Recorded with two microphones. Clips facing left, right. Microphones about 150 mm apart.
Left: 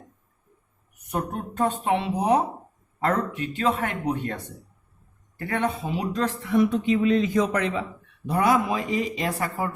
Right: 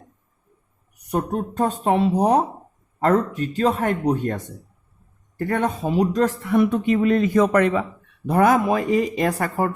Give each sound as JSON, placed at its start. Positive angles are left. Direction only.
{"t": 1.1, "sound": "speech", "side_deg": -35}
{"t": 6.4, "sound": "speech", "side_deg": -55}